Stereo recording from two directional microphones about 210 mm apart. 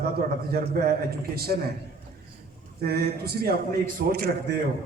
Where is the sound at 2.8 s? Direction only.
50° right (ahead or behind).